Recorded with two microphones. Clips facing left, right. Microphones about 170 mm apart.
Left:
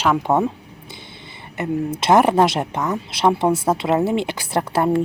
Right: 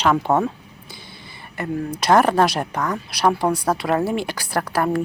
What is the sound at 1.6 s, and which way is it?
A woman's voice, 20° left (ahead or behind).